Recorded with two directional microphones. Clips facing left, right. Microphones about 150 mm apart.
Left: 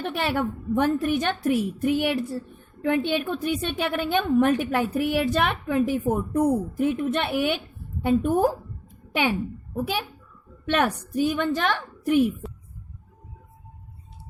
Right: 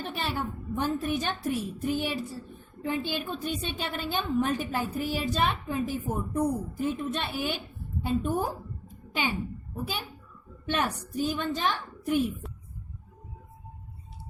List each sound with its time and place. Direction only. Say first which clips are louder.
0.0 s a woman's voice: left 7 dB; 65° left (ahead or behind)
10.7 s a woman's voice: left 6 dB; 65° left (ahead or behind)
12.4 s a sound: left 6 dB; centre (ahead or behind)